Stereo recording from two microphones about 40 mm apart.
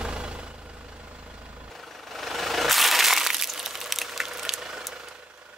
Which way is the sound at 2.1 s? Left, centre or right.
Centre.